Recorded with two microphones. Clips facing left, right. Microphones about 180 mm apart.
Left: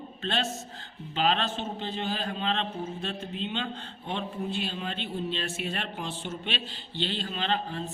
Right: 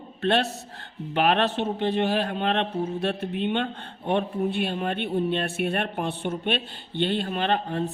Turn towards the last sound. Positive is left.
turn(degrees=-60)  # may be behind; listen again after turning